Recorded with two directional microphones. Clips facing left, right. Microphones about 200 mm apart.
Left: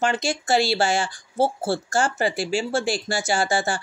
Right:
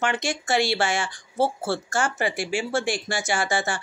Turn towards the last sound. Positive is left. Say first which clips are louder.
# left 3 dB
turn(degrees=30)  # may be behind; listen again after turning